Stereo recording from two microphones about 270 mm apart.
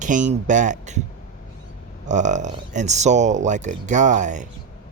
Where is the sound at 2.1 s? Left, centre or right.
Right.